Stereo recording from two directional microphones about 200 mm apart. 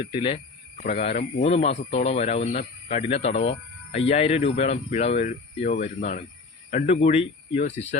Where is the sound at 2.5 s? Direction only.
40° left (ahead or behind).